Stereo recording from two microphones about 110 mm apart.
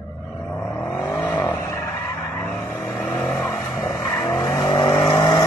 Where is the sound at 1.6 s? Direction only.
30° left (ahead or behind).